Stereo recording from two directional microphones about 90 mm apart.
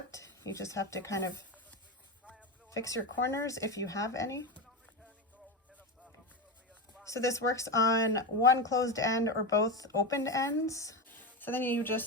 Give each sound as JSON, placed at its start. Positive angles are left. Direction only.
{"t": 0.1, "sound": "speech", "side_deg": 35}
{"t": 2.6, "sound": "speech", "side_deg": 35}
{"t": 7.0, "sound": "speech", "side_deg": 35}
{"t": 11.2, "sound": "a woman's voice", "side_deg": 20}